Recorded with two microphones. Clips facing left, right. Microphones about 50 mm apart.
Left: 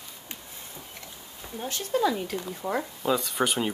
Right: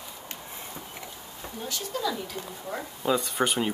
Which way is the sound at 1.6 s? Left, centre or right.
Left.